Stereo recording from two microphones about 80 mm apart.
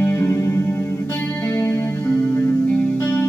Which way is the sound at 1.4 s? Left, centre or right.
Left.